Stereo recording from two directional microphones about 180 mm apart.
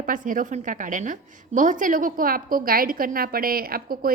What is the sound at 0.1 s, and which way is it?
A woman's voice, 45° right (ahead or behind).